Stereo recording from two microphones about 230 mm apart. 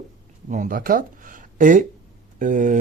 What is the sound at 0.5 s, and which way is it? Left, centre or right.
Speech, right.